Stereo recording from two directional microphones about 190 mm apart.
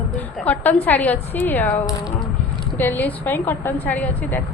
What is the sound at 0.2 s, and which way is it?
A woman's voice, 10° left (ahead or behind).